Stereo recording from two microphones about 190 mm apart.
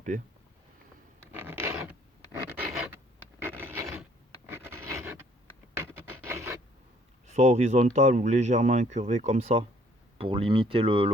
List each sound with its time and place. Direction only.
1.3 s zipper: 10° right (ahead or behind)
2.6 s a sound: 10° right (ahead or behind)
5.7 s rub: 15° right (ahead or behind)
7.3 s speech: 35° right (ahead or behind)